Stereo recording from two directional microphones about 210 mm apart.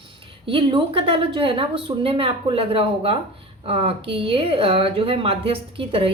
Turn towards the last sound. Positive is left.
turn(degrees=-25)  # may be behind; listen again after turning